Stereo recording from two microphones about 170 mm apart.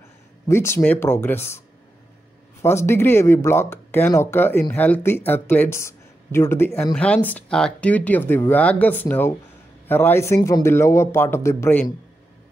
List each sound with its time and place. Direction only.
0.5 s speech: 15° left (ahead or behind)
2.6 s speech: 15° left (ahead or behind)